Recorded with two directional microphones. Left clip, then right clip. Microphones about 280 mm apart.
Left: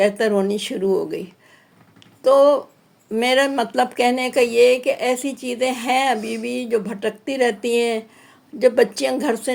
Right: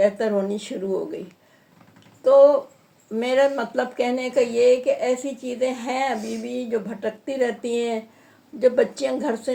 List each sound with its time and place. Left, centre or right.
0.0 s speech: left
2.2 s speech: left